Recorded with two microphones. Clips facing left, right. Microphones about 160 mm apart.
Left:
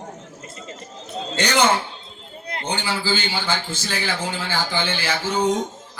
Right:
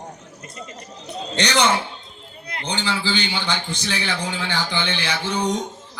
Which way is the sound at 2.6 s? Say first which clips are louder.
Even; 10° left (ahead or behind).